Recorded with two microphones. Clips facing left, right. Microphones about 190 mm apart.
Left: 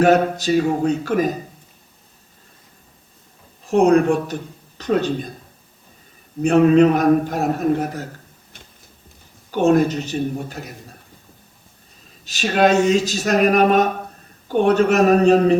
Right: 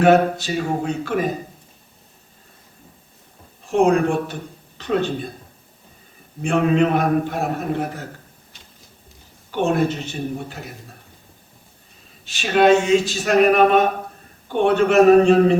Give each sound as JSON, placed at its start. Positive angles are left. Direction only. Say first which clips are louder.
{"t": 0.0, "sound": "speech", "louder": "even", "side_deg": 40}
{"t": 3.7, "sound": "speech", "louder": "left 2 dB", "side_deg": 40}
{"t": 6.4, "sound": "speech", "louder": "left 5 dB", "side_deg": 40}
{"t": 9.6, "sound": "speech", "louder": "left 4 dB", "side_deg": 40}
{"t": 12.2, "sound": "speech", "louder": "right 1 dB", "side_deg": 40}